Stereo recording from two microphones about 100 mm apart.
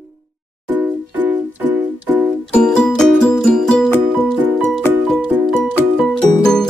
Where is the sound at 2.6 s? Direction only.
10° left (ahead or behind).